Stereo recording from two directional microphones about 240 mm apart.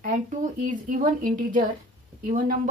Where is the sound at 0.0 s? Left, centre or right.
Right.